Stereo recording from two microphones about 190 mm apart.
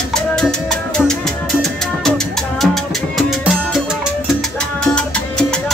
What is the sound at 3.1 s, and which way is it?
Music, centre (ahead or behind).